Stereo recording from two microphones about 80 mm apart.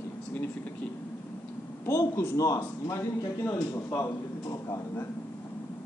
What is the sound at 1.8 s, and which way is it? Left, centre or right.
A man's voice, left.